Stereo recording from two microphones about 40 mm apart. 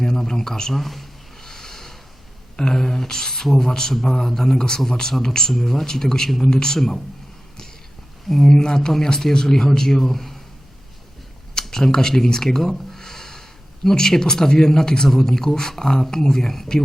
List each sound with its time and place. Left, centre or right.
0.0 s a man's voice: centre
0.7 s a sound: centre
2.6 s speech: centre
8.3 s speech: centre
11.7 s speech: centre